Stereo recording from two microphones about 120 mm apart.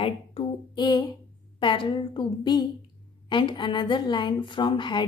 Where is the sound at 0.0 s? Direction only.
45° left (ahead or behind).